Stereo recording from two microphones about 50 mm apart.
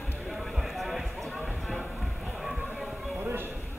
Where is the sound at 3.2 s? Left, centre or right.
Right.